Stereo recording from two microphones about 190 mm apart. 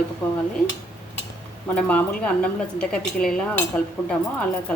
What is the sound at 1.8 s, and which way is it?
Speech, 5° left (ahead or behind).